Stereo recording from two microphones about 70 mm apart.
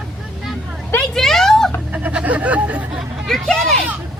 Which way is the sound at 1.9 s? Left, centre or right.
Centre.